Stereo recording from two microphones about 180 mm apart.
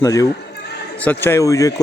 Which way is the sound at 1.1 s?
15° left (ahead or behind).